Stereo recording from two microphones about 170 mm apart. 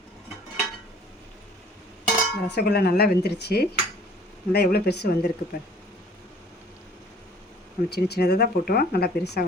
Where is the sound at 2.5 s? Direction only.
70° left (ahead or behind).